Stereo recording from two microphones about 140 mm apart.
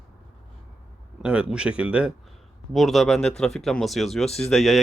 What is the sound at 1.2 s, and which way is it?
Speech, 10° right (ahead or behind).